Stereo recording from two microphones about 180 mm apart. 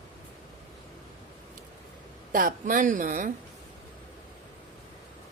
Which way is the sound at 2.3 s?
50° right (ahead or behind).